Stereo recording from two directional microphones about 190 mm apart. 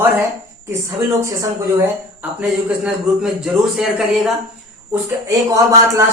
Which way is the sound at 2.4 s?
5° right (ahead or behind).